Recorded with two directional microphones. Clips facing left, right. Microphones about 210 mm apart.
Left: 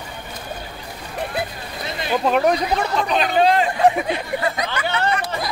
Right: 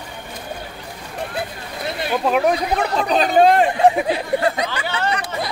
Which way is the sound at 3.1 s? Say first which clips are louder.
Right 4 dB; 40° right (ahead or behind).